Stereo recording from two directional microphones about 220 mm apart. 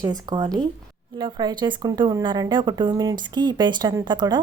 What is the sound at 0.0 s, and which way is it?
A woman's voice, 15° right (ahead or behind).